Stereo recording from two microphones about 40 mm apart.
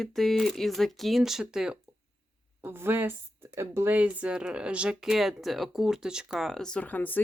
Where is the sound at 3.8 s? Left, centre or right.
Right.